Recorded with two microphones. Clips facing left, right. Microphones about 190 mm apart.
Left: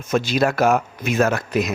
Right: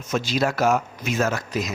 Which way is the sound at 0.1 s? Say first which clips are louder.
Left 4 dB; 55° left (ahead or behind).